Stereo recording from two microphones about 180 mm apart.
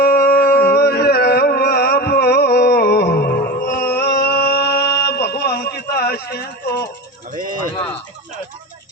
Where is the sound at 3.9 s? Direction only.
65° left (ahead or behind).